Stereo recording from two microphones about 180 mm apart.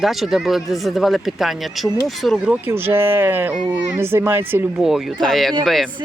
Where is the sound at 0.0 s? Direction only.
Centre (ahead or behind).